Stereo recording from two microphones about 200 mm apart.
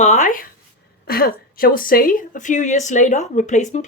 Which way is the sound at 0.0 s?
40° left (ahead or behind).